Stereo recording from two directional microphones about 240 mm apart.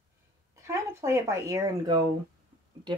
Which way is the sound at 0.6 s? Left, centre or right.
Centre.